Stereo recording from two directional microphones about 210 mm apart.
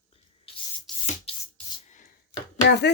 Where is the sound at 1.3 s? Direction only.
30° left (ahead or behind).